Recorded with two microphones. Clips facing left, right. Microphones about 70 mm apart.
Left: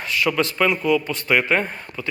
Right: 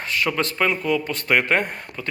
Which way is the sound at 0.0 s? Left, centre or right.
Right.